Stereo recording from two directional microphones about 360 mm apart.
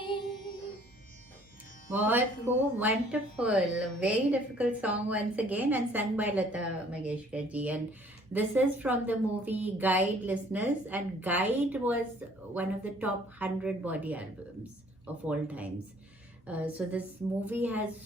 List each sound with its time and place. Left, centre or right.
2.0 s a woman's voice: centre